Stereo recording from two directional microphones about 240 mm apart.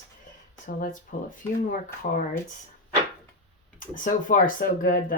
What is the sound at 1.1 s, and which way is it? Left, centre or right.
Speech, left.